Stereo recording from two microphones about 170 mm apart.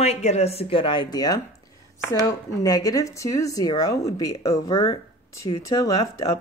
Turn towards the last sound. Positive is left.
turn(degrees=20)  # may be behind; listen again after turning